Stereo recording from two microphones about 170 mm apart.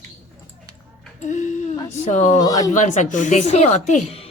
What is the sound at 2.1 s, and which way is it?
Speech, 45° left (ahead or behind).